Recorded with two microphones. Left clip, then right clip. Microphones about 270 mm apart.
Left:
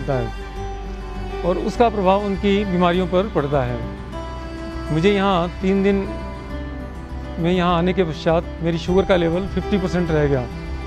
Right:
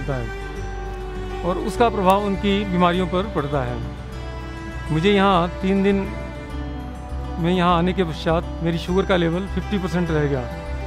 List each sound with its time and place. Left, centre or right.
1.5 s speech: left
4.9 s speech: left
7.4 s speech: left